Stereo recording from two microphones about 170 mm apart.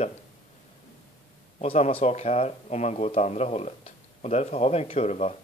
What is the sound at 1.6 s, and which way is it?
Speech, 35° left (ahead or behind).